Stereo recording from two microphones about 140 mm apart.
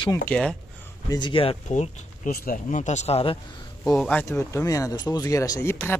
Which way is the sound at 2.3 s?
80° left.